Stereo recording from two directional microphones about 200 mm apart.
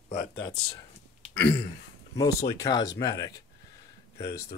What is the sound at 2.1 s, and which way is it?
Speech, 20° left (ahead or behind).